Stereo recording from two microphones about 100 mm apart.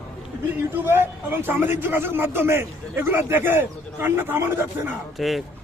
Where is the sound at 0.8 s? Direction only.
20° right (ahead or behind).